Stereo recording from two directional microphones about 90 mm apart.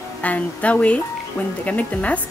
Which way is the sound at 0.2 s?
15° left (ahead or behind).